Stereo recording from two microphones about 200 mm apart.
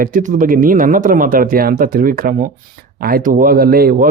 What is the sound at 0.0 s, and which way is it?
Speech, 40° right (ahead or behind).